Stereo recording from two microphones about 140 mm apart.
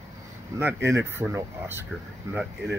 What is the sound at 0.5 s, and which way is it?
Speech, 15° right (ahead or behind).